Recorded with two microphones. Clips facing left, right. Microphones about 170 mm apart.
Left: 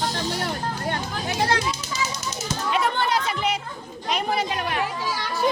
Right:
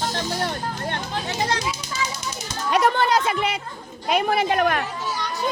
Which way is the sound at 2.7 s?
45° right (ahead or behind).